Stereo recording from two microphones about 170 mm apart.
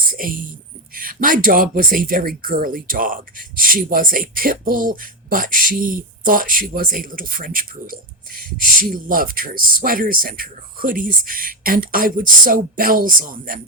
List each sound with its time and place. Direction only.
0.1 s speech: 55° right (ahead or behind)